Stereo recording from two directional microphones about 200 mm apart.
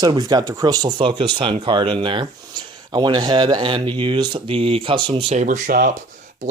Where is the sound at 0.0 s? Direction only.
20° right (ahead or behind).